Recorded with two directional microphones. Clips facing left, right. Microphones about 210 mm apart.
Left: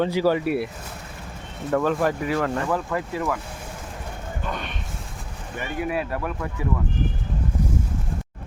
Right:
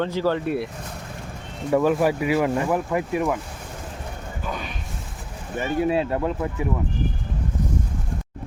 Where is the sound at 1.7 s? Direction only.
10° right (ahead or behind).